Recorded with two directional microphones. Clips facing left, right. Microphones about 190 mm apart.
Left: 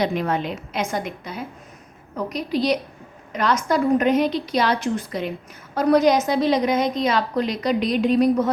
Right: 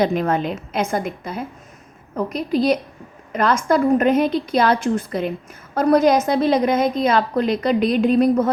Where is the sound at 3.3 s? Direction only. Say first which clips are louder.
Right 3 dB; 50° right (ahead or behind).